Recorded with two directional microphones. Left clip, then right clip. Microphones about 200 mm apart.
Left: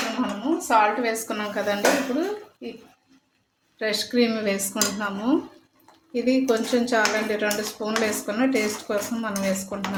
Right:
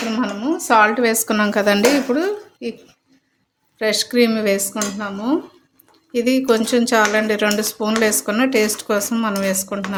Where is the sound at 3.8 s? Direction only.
30° right (ahead or behind).